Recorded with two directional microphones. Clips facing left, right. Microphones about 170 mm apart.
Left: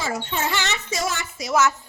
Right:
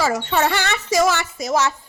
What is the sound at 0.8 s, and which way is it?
Speech, 90° right.